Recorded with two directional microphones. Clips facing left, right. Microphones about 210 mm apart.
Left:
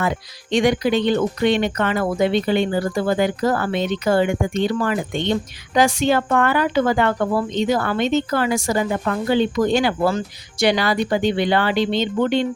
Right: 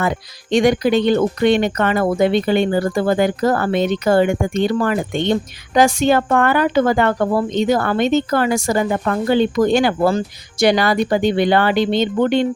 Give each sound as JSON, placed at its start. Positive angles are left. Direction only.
{"t": 0.0, "sound": "speech", "side_deg": -45}
{"t": 10.1, "sound": "speech", "side_deg": -40}